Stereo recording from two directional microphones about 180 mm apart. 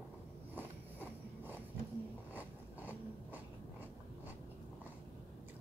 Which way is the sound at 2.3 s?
10° right (ahead or behind).